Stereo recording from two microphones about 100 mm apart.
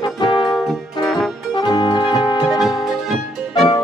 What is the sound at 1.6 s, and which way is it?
Music, 50° left (ahead or behind).